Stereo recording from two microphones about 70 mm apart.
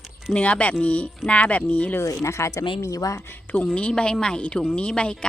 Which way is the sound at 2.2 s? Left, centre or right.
Left.